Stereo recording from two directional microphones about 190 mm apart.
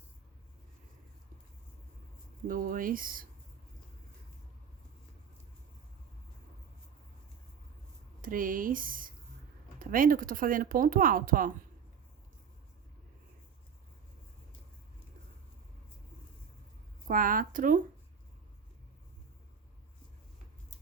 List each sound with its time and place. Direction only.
2.5 s speech: 45° right (ahead or behind)
8.2 s speech: 45° right (ahead or behind)
17.1 s speech: 45° right (ahead or behind)